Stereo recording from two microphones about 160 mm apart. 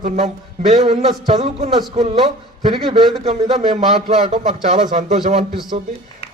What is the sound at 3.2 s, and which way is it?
A man's voice, 40° right (ahead or behind).